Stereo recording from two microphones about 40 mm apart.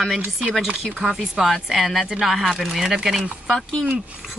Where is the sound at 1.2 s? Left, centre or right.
Centre.